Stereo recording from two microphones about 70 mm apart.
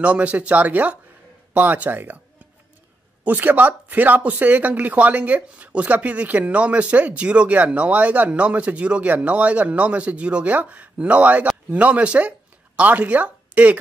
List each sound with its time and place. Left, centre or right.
0.0 s speech: centre
3.3 s speech: right